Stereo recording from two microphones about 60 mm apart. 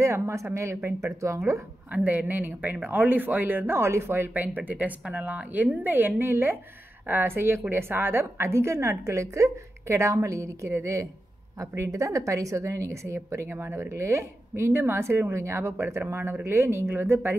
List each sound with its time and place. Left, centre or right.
0.0 s a woman's voice: right
1.9 s speech: right
4.3 s speech: right
9.0 s a woman's voice: right